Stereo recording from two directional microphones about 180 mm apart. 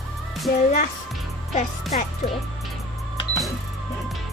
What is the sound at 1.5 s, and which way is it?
Speech, 40° left (ahead or behind).